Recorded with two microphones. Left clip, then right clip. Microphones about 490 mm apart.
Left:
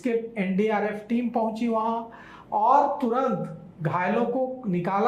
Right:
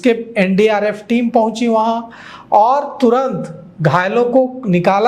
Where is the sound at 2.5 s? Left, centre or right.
Right.